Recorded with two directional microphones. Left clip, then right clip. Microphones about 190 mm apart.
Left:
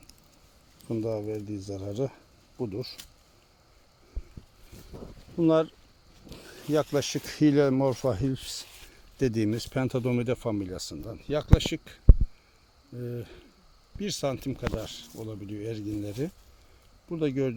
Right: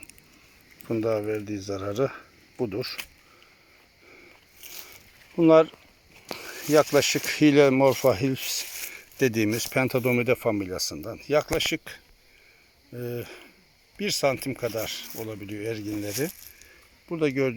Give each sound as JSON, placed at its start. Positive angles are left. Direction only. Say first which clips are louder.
{"t": 0.9, "sound": "speech", "louder": "right 5 dB", "side_deg": -10}
{"t": 5.4, "sound": "speech", "louder": "right 6 dB", "side_deg": -5}
{"t": 13.0, "sound": "speech", "louder": "right 5 dB", "side_deg": 0}